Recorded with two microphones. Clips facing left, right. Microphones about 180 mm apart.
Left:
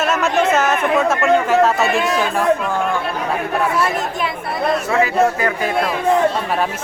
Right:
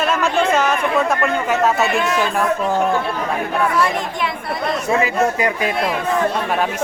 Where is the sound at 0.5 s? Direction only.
5° left (ahead or behind).